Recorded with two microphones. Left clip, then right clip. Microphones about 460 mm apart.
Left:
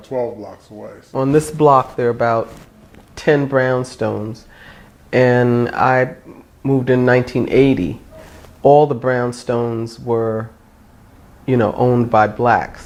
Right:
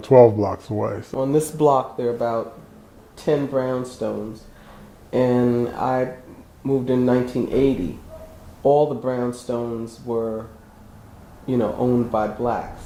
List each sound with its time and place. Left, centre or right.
0.0 s speech: right
1.2 s speech: left
5.1 s speech: left
8.6 s speech: left
11.4 s speech: left